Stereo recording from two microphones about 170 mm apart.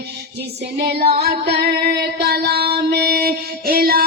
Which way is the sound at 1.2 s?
75° right (ahead or behind).